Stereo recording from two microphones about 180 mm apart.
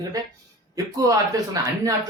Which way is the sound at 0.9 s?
20° right (ahead or behind).